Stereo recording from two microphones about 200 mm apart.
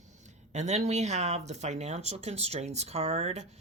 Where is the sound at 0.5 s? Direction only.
35° right (ahead or behind).